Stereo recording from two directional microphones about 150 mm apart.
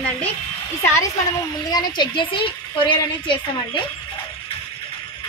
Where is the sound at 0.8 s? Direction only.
20° left (ahead or behind).